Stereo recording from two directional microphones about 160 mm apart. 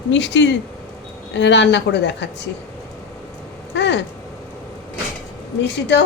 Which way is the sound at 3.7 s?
90° left.